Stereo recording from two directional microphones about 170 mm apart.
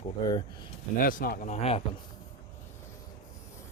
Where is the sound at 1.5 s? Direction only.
35° left (ahead or behind).